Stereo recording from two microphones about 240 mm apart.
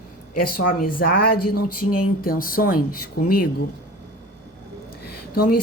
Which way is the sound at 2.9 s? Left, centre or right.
Left.